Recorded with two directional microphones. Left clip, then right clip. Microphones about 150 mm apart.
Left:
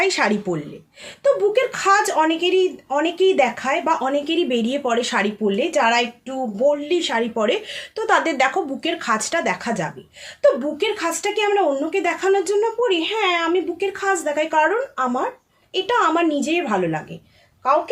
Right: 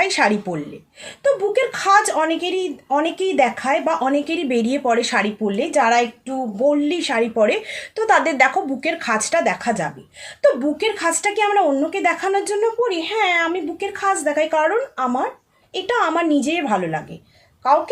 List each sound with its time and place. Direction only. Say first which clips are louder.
0.0 s speech: right 2 dB; 20° left (ahead or behind)